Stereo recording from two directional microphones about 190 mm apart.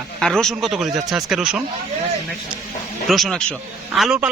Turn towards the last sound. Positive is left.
turn(degrees=0)  # may be behind; listen again after turning